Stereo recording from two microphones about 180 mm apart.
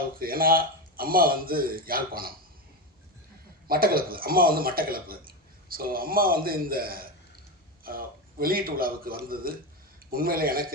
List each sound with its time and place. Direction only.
0.2 s speech: 55° right (ahead or behind)
3.7 s speech: 55° right (ahead or behind)